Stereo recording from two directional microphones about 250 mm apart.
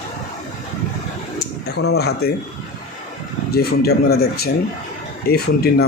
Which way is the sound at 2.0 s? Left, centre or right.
Left.